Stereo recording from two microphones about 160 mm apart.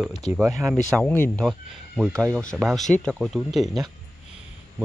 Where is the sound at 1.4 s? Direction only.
5° right (ahead or behind).